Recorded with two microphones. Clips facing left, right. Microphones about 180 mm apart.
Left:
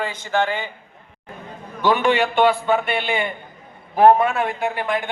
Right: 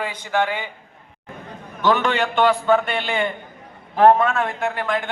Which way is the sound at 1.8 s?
15° left (ahead or behind).